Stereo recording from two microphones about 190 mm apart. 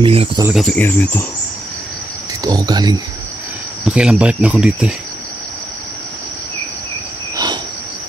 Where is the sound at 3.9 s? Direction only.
5° right (ahead or behind).